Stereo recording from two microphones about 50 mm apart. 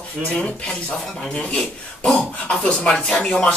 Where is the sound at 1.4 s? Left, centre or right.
Left.